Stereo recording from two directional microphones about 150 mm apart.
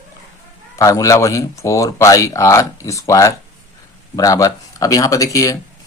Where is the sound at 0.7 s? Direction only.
20° left (ahead or behind).